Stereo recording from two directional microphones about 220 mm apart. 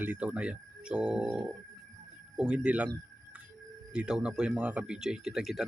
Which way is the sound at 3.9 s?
5° right (ahead or behind).